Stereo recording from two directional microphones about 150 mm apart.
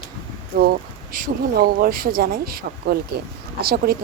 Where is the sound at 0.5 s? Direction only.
90° right.